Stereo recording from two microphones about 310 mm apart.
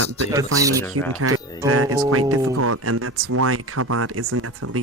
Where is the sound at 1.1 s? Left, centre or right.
Right.